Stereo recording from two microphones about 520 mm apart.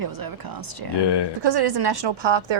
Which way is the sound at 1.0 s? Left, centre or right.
Left.